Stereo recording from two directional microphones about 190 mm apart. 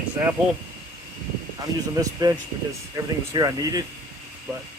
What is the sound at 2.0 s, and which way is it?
Speech, 20° right (ahead or behind).